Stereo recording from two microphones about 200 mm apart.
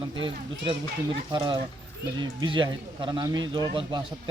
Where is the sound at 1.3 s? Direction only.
20° right (ahead or behind).